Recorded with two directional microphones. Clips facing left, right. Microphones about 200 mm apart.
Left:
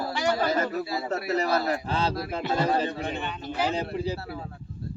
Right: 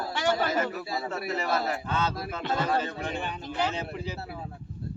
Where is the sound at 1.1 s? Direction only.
40° left (ahead or behind).